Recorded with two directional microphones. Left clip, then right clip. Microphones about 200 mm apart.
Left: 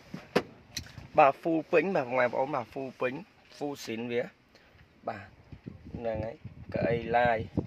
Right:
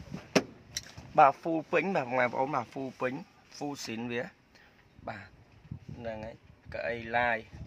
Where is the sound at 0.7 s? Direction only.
10° left (ahead or behind).